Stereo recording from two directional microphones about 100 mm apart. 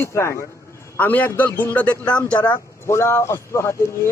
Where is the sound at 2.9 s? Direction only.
25° left (ahead or behind).